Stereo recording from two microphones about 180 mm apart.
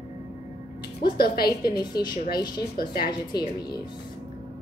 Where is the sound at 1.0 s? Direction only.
55° left (ahead or behind).